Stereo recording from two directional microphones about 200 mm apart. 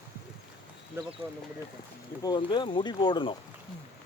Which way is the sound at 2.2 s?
20° left (ahead or behind).